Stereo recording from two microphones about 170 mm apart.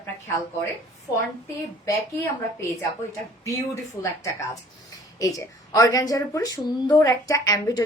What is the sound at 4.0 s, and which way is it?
A woman's voice, 15° left (ahead or behind).